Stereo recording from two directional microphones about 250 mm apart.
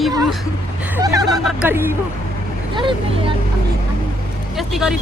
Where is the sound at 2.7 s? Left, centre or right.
Centre.